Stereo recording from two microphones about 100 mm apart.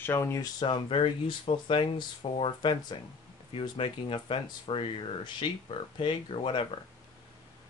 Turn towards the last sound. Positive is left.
turn(degrees=65)  # may be behind; listen again after turning